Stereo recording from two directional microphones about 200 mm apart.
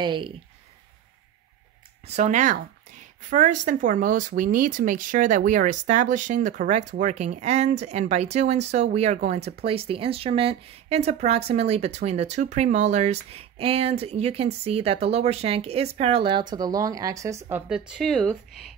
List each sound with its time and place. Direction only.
0.0 s speech: 25° right (ahead or behind)
2.0 s a woman's voice: 35° right (ahead or behind); by 18.4 s centre (ahead or behind)